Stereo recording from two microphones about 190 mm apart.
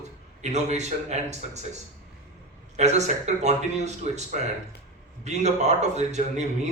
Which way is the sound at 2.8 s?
35° right (ahead or behind).